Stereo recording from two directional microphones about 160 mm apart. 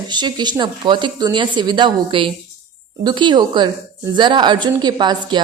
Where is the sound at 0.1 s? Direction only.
30° right (ahead or behind).